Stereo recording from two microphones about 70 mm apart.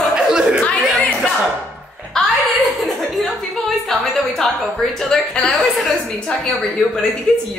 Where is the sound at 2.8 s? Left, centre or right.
Centre.